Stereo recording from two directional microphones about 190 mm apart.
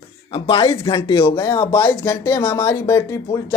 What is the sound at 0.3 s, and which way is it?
Speech, 30° left (ahead or behind).